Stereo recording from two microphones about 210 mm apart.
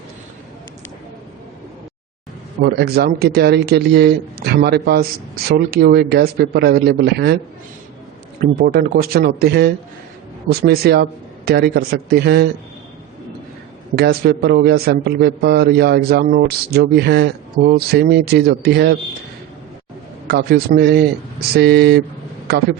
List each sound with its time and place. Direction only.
2.6 s a man's voice: 50° right (ahead or behind)
8.4 s a man's voice: 45° right (ahead or behind)
13.9 s a man's voice: 50° right (ahead or behind)
20.2 s a man's voice: 50° right (ahead or behind)